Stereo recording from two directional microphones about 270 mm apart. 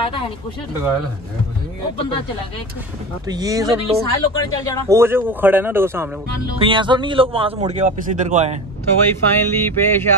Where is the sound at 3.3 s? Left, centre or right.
Centre.